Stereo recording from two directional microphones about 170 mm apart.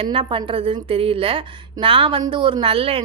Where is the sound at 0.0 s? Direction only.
30° right (ahead or behind).